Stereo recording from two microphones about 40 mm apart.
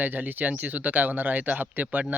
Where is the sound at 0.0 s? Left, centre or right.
Right.